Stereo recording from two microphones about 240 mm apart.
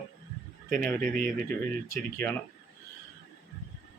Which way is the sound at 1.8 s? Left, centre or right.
Centre.